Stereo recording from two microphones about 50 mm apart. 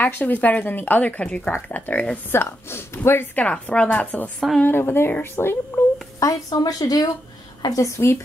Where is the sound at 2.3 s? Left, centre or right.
Left.